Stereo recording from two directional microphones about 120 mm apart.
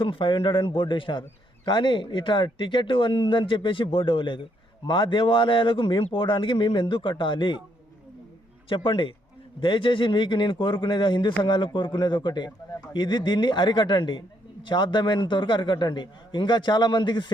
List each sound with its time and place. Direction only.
0.0 s speech: 45° left (ahead or behind)
8.7 s speech: 45° left (ahead or behind)